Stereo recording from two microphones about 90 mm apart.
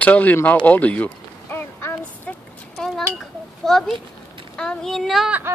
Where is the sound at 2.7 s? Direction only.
5° left (ahead or behind).